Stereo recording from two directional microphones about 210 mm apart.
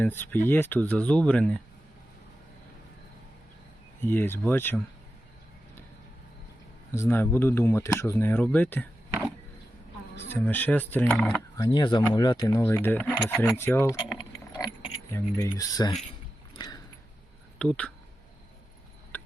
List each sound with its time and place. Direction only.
0.0 s speech: 10° left (ahead or behind)
4.0 s speech: 10° left (ahead or behind)
6.9 s speech: 10° left (ahead or behind)
10.2 s speech: 10° left (ahead or behind)
11.5 s speech: 20° left (ahead or behind)
16.6 s a sound: 20° left (ahead or behind)
17.6 s speech: 5° left (ahead or behind)